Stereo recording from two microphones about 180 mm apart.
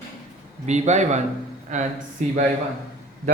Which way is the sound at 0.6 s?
40° right (ahead or behind).